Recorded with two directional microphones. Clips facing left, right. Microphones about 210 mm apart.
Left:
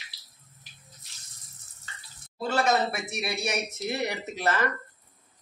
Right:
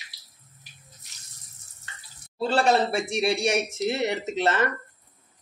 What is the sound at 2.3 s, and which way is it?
Speech, 30° right (ahead or behind).